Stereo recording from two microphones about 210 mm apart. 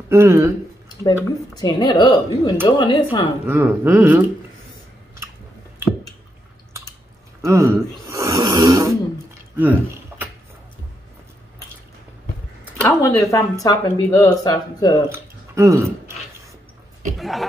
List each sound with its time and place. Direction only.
0.1 s speech: 15° right (ahead or behind)
1.0 s speech: 20° left (ahead or behind)
3.4 s speech: 10° right (ahead or behind)
7.4 s snoring: 15° right (ahead or behind)
9.6 s a sound: 10° right (ahead or behind)
12.8 s speech: 15° left (ahead or behind)
15.0 s a sound: 15° right (ahead or behind)
17.2 s speech: centre (ahead or behind)